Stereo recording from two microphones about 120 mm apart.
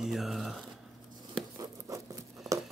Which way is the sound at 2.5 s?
Centre (ahead or behind).